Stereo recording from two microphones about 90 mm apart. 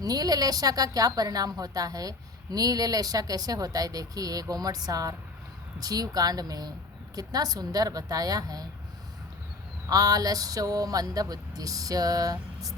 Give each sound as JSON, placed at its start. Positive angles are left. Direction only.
{"t": 0.0, "sound": "a woman's voice", "side_deg": -45}
{"t": 9.9, "sound": "a woman's voice", "side_deg": -45}